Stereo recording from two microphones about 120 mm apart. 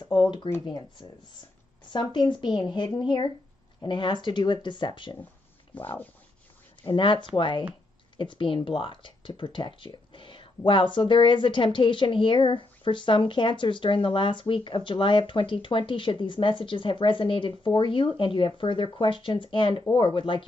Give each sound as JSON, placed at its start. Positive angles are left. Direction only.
{"t": 0.1, "sound": "a woman's voice", "side_deg": 45}
{"t": 6.8, "sound": "speech", "side_deg": 40}